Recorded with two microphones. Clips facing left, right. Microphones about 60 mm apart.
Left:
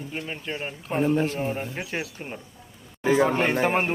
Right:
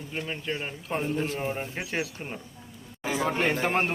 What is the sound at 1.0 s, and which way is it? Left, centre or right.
Speech, left.